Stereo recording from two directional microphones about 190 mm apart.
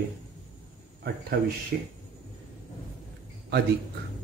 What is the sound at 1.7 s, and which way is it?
Speech, 55° right (ahead or behind).